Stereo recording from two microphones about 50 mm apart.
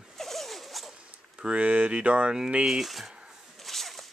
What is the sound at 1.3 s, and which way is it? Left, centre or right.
Speech, right.